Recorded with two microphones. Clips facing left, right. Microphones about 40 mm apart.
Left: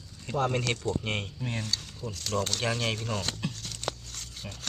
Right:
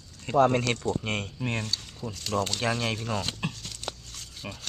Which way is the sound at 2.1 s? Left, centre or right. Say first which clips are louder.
Right 2 dB; right.